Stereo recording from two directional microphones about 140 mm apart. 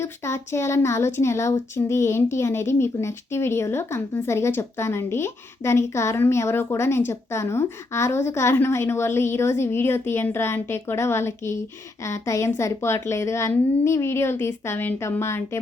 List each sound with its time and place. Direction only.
0.0 s a woman's voice: 20° left (ahead or behind)